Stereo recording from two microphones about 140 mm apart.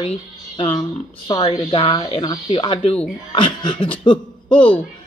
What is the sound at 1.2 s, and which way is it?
Speech, 35° left (ahead or behind).